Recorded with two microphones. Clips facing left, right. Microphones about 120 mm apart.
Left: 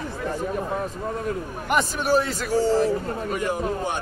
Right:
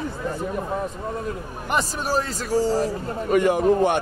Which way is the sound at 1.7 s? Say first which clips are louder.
Left 2 dB; 35° right (ahead or behind).